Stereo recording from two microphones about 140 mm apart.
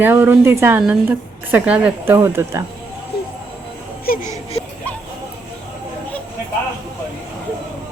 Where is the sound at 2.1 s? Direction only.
20° right (ahead or behind).